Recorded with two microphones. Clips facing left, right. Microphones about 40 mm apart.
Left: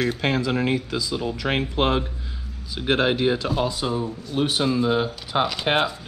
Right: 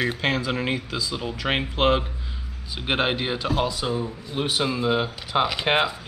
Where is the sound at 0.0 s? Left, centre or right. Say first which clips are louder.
Left 1 dB; right.